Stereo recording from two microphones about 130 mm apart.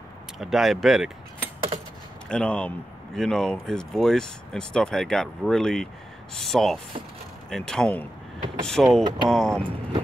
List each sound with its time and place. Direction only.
0.4 s speech: centre (ahead or behind)
2.2 s speech: 5° left (ahead or behind)
9.6 s speech: 45° right (ahead or behind)